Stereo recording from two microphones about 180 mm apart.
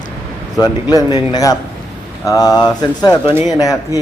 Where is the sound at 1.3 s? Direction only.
20° left (ahead or behind).